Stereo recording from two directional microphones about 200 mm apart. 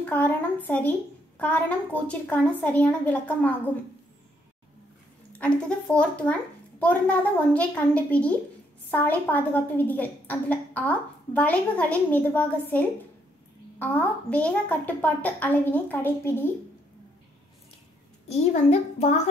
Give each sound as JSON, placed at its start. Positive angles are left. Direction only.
{"t": 0.1, "sound": "a woman's voice", "side_deg": 10}
{"t": 5.3, "sound": "a woman's voice", "side_deg": 5}
{"t": 18.3, "sound": "a child's voice", "side_deg": 35}